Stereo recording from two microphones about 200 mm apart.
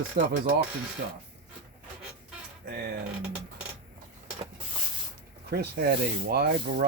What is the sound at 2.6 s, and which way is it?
Speech, 50° right (ahead or behind).